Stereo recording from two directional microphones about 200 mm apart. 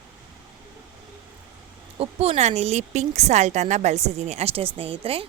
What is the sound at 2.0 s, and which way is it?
Speech, 30° right (ahead or behind).